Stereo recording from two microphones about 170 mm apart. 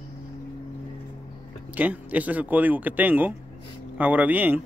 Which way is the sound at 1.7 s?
10° right (ahead or behind).